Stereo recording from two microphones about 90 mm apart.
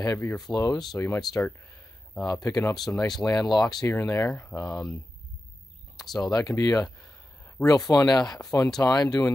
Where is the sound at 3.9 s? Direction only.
30° left (ahead or behind).